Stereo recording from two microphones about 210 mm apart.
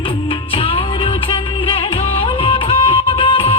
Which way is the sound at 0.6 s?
25° left (ahead or behind).